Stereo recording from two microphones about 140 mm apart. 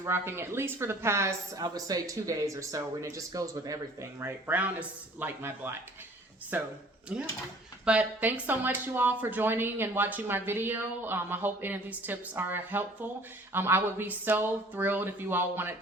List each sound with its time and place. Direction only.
0.0 s speech: 15° right (ahead or behind)